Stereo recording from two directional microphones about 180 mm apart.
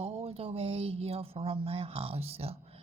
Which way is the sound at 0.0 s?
30° right (ahead or behind).